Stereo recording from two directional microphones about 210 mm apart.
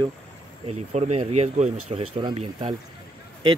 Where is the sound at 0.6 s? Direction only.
30° right (ahead or behind).